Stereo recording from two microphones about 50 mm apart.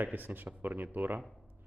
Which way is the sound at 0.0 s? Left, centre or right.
Right.